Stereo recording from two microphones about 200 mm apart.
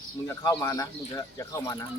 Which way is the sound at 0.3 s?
15° left (ahead or behind).